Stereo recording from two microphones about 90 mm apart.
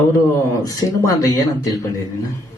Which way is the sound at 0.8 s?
45° left (ahead or behind).